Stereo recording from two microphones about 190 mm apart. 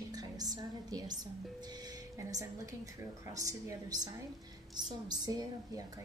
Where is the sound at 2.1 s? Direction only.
15° right (ahead or behind).